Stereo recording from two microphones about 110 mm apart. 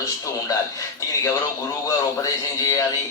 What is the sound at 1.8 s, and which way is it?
A man's voice, 30° left (ahead or behind).